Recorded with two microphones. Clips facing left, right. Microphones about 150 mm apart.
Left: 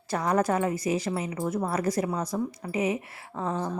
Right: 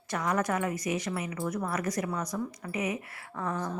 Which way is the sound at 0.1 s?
30° left (ahead or behind).